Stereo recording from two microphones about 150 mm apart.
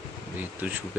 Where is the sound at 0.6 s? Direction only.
10° right (ahead or behind).